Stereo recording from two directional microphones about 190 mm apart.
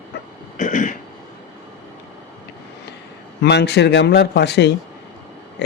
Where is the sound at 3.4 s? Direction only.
60° left (ahead or behind).